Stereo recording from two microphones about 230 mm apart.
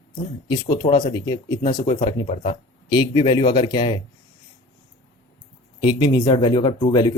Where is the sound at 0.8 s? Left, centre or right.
Centre.